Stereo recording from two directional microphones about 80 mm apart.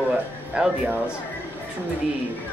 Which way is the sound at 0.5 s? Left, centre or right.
Centre.